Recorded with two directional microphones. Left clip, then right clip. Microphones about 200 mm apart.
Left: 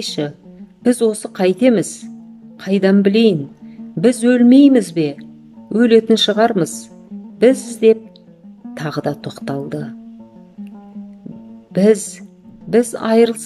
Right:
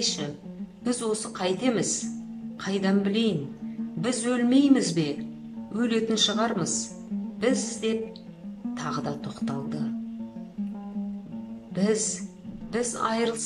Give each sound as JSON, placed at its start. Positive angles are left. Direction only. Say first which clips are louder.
{"t": 0.0, "sound": "speech", "louder": "left 7 dB", "side_deg": 50}
{"t": 11.7, "sound": "speech", "louder": "left 13 dB", "side_deg": 50}